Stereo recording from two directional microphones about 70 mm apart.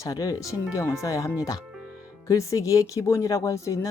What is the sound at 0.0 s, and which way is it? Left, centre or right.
Speech, left.